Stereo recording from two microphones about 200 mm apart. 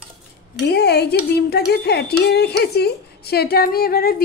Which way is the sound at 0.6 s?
60° left (ahead or behind).